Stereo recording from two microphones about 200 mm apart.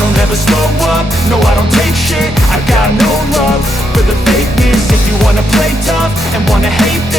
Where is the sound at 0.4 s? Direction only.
Centre (ahead or behind).